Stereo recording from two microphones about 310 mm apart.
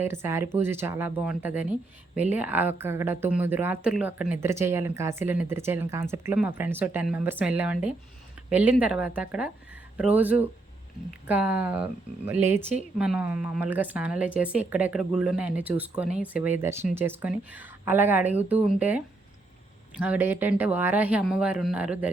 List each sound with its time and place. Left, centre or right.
0.0 s speech: centre